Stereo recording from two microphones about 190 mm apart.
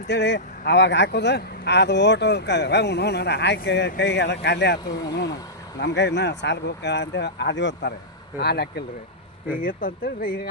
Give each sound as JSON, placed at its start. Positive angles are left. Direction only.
{"t": 0.1, "sound": "speech", "side_deg": 65}
{"t": 9.6, "sound": "speech", "side_deg": 45}